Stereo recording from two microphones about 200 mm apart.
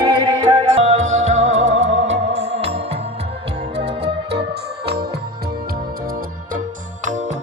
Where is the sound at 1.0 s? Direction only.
35° right (ahead or behind).